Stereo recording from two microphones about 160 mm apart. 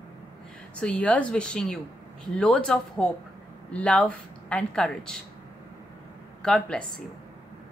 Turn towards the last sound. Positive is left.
turn(degrees=5)  # may be behind; listen again after turning